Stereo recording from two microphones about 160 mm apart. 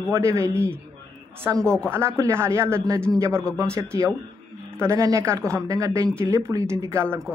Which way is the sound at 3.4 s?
5° left (ahead or behind).